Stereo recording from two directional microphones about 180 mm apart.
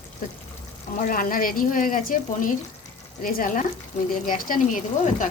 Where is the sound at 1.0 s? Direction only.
50° left (ahead or behind).